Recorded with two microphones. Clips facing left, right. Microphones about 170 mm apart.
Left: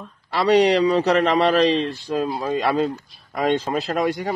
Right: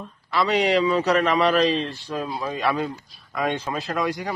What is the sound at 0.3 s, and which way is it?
A man's voice, 40° left (ahead or behind).